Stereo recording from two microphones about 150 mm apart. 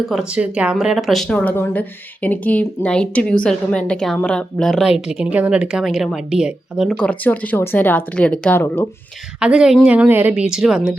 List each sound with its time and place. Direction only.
0.1 s a woman's voice: 5° right (ahead or behind)
6.9 s speech: 10° left (ahead or behind)
9.4 s a woman's voice: 5° right (ahead or behind)